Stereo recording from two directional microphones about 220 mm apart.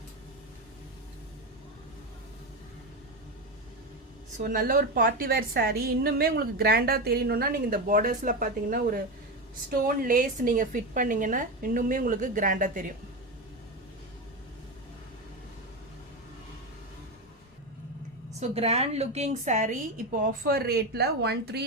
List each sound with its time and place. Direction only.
4.4 s a woman's voice: 40° right (ahead or behind)
18.3 s a woman's voice: 30° right (ahead or behind); by 21.6 s 50° right (ahead or behind)